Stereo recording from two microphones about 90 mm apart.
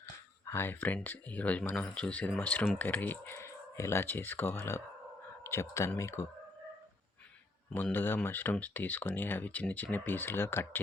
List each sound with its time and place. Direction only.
0.0 s a sound: 25° left (ahead or behind)
1.0 s speech: 20° left (ahead or behind)
7.9 s speech: 25° left (ahead or behind)